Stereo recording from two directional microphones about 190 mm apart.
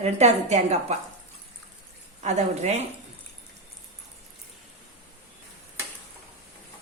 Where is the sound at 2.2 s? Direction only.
35° right (ahead or behind).